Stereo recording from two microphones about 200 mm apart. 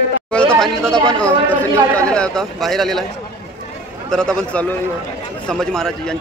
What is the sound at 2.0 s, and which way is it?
A man's voice, 5° left (ahead or behind).